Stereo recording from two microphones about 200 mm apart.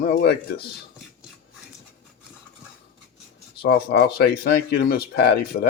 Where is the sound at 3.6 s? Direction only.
55° left (ahead or behind).